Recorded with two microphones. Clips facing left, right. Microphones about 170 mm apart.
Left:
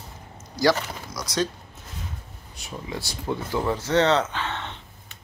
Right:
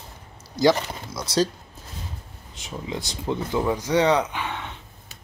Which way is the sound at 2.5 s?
20° right (ahead or behind).